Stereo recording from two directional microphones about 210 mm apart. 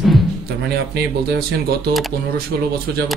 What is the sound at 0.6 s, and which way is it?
Speech, 50° right (ahead or behind).